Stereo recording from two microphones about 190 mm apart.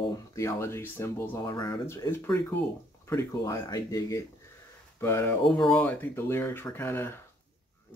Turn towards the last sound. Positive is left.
turn(degrees=10)  # may be behind; listen again after turning